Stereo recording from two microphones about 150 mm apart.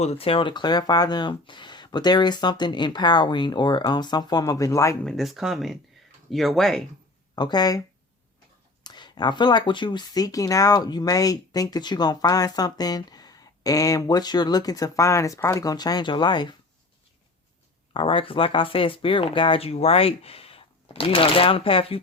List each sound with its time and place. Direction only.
0.0 s speech: 40° left (ahead or behind); by 4.9 s 20° left (ahead or behind)
5.0 s speech: centre (ahead or behind)
7.3 s speech: 30° left (ahead or behind)
8.8 s speech: 30° left (ahead or behind)
17.9 s speech: 35° left (ahead or behind)